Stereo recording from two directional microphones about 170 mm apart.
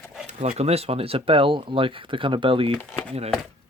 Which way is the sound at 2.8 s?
10° left (ahead or behind).